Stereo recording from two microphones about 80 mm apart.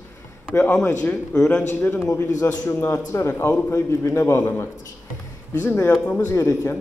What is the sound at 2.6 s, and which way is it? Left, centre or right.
A man's voice, left.